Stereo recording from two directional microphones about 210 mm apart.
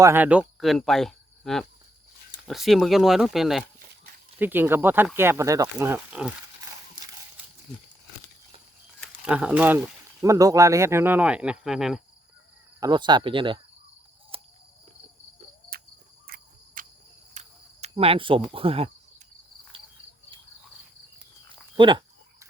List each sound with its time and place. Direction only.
0.0 s speech: 10° right (ahead or behind)
9.0 s speech: 5° right (ahead or behind)
12.8 s speech: 20° right (ahead or behind)
14.3 s cricket: 25° right (ahead or behind)
15.7 s cricket: 45° right (ahead or behind)
17.3 s cricket: 30° right (ahead or behind)
18.5 s speech: 25° right (ahead or behind)
21.8 s a sound: 20° right (ahead or behind)